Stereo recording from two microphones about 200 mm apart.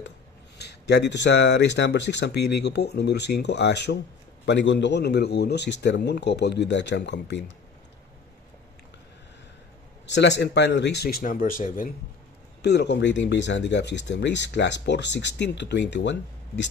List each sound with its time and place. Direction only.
0.6 s speech: 55° left (ahead or behind)
10.0 s speech: 60° left (ahead or behind); by 11.9 s 45° left (ahead or behind)
12.6 s speech: 60° left (ahead or behind)